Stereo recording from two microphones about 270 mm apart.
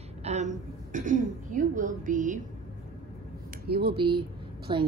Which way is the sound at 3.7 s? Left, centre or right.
Right.